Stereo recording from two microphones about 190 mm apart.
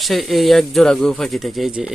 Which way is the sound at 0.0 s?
Centre (ahead or behind).